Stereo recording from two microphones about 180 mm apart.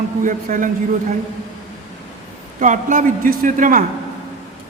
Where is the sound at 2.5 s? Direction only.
45° right (ahead or behind).